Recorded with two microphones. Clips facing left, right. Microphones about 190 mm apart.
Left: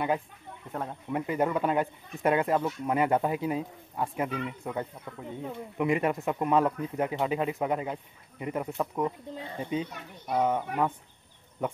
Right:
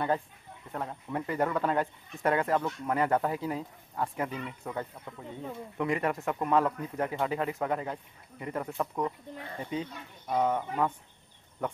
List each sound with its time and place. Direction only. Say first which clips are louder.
0.7 s speech: left 1 dB; 5° left (ahead or behind)
1.1 s speech: left 2 dB; 15° left (ahead or behind)
8.6 s speech: left 2 dB; 10° left (ahead or behind)
9.0 s speech: left 3 dB; 20° left (ahead or behind)